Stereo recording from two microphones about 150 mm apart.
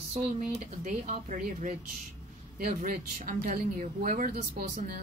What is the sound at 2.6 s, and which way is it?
A man's voice, 70° right (ahead or behind).